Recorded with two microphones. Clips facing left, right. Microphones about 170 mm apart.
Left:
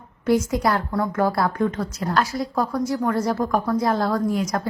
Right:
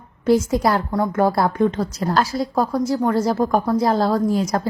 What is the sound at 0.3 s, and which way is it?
A woman's voice, 30° right (ahead or behind).